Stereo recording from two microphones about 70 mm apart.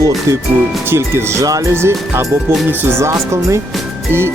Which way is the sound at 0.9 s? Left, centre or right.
Right.